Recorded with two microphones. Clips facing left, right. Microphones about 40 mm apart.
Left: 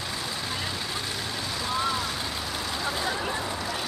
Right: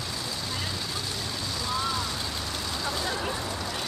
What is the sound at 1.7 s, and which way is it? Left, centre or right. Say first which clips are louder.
Vehicle: left 2 dB; centre.